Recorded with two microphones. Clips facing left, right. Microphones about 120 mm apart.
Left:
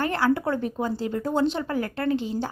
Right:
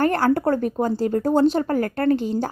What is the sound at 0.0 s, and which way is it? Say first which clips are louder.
A woman's voice: right 5 dB; 45° right (ahead or behind).